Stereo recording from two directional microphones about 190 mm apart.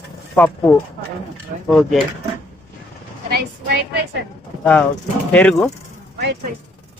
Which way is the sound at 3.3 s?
55° right (ahead or behind).